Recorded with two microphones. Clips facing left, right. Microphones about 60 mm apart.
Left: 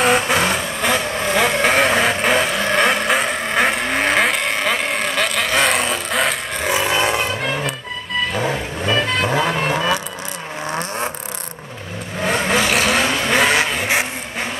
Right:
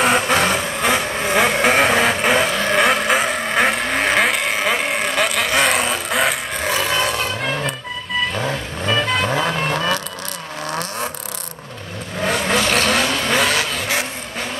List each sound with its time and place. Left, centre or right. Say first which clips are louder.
0.0 s vehicle: even; centre
6.7 s vehicle: left 2 dB; centre
7.2 s music: left 1 dB; centre
8.3 s vehicle: left 2 dB; centre
10.7 s vehicle: left 1 dB; left
12.4 s vehicle: even; centre; by 14.0 s left